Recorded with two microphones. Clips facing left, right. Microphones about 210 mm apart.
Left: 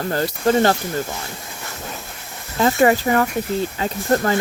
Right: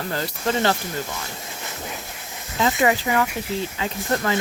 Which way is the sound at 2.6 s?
40° left (ahead or behind).